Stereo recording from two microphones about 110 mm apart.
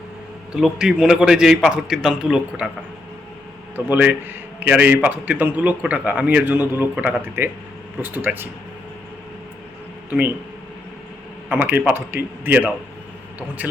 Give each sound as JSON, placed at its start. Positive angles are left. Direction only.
{"t": 0.5, "sound": "a man's voice", "side_deg": -5}
{"t": 3.8, "sound": "a man's voice", "side_deg": -15}
{"t": 10.1, "sound": "speech", "side_deg": -15}
{"t": 11.4, "sound": "a man's voice", "side_deg": -15}